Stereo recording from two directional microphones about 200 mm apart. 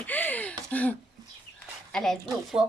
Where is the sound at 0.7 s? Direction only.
10° left (ahead or behind).